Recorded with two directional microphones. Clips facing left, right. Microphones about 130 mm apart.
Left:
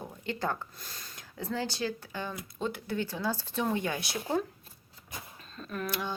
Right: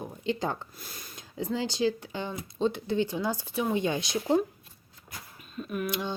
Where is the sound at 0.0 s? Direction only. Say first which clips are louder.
Right 4 dB; 20° right (ahead or behind).